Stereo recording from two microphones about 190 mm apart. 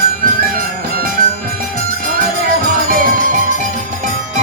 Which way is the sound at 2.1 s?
45° right (ahead or behind).